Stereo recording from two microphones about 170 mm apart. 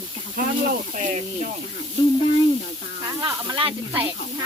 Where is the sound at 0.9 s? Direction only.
45° right (ahead or behind).